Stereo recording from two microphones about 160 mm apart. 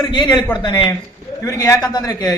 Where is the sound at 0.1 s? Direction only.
30° left (ahead or behind).